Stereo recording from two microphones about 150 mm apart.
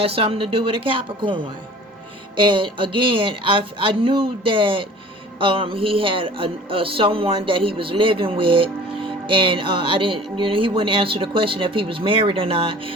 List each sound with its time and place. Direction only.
0.0 s speech: 40° right (ahead or behind)